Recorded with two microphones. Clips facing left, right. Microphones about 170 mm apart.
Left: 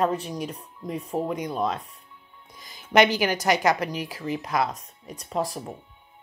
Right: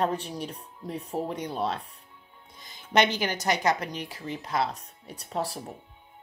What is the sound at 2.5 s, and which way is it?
Music, 25° right (ahead or behind).